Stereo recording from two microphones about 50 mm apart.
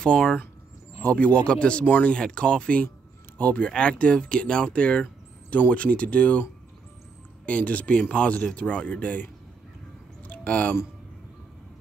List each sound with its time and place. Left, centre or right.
0.0 s speech: centre
1.0 s speech: left
7.4 s speech: left
10.2 s music: left